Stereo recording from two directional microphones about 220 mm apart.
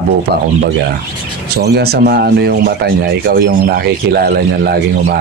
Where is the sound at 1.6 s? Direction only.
45° right (ahead or behind).